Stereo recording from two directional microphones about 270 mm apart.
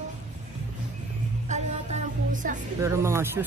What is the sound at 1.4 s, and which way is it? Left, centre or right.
Music, right.